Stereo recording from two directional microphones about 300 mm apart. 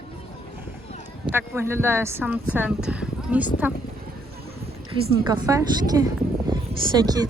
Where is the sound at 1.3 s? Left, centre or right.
Centre.